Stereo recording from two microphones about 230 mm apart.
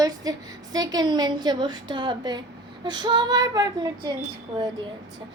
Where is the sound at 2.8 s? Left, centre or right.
Centre.